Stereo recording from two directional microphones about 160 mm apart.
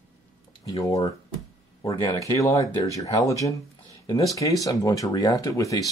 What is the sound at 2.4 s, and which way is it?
Speech, 20° left (ahead or behind).